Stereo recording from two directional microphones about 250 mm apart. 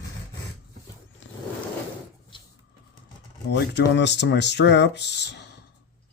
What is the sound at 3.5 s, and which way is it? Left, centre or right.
Speech, left.